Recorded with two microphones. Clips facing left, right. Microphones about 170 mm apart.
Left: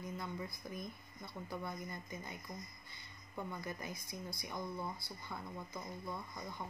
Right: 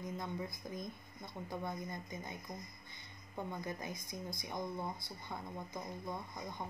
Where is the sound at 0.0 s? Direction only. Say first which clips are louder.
Right 2 dB; 20° right (ahead or behind).